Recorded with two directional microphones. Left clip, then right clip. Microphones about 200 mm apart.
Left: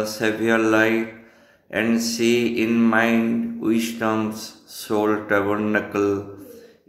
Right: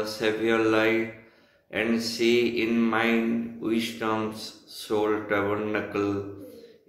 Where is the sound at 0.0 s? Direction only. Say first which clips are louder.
Left 4 dB; 50° left (ahead or behind).